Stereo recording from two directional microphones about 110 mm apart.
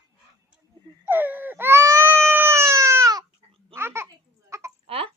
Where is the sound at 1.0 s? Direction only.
15° right (ahead or behind); by 3.3 s 30° right (ahead or behind).